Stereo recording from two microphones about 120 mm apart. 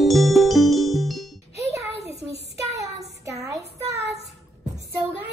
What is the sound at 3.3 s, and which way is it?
Child singing, 25° right (ahead or behind).